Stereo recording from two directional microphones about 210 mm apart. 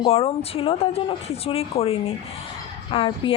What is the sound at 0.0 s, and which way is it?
Speech, 25° left (ahead or behind).